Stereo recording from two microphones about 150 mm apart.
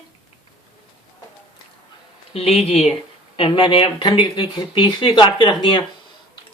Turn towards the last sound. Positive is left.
turn(degrees=35)  # may be behind; listen again after turning